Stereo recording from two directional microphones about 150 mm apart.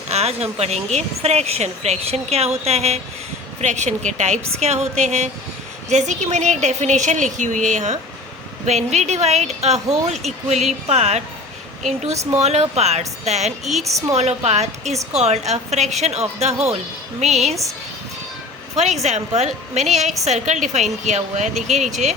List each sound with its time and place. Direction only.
0.1 s speech: 45° right (ahead or behind)
12.1 s speech: 20° right (ahead or behind)
12.4 s speech: 45° right (ahead or behind)
19.0 s speech: 50° right (ahead or behind)